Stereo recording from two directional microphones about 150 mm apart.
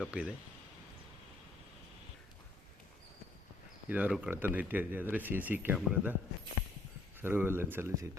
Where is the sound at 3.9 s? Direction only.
10° right (ahead or behind).